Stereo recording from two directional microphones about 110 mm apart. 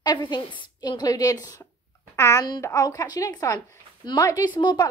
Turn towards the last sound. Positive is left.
turn(degrees=45)  # may be behind; listen again after turning